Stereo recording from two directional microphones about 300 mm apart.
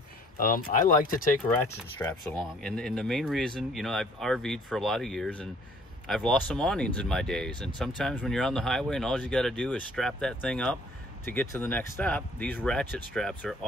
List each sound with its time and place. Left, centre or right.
0.4 s speech: left
2.0 s speech: centre